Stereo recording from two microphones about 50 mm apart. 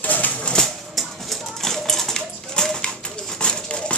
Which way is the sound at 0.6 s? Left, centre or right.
Centre.